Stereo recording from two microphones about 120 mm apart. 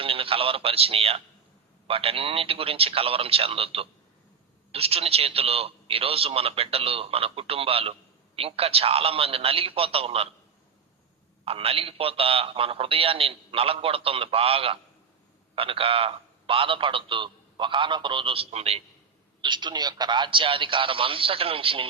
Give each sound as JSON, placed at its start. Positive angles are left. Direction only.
{"t": 0.0, "sound": "radio", "side_deg": -50}
{"t": 1.9, "sound": "a man's voice", "side_deg": -50}
{"t": 11.4, "sound": "a man's voice", "side_deg": -55}
{"t": 19.4, "sound": "a man's voice", "side_deg": -40}